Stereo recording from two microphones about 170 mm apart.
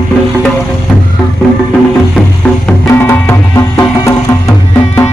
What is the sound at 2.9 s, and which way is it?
Music, 15° left (ahead or behind).